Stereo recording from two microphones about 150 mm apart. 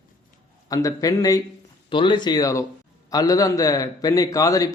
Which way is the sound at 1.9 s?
35° left (ahead or behind).